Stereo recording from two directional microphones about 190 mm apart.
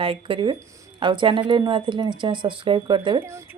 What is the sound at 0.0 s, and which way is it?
Speech, 30° right (ahead or behind).